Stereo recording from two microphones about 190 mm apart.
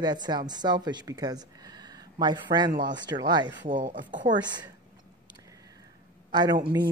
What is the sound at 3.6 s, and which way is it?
Speech, 45° right (ahead or behind).